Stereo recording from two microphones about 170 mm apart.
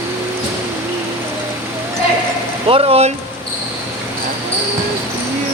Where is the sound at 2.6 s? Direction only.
35° right (ahead or behind).